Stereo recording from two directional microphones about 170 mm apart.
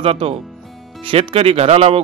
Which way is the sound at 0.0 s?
35° right (ahead or behind).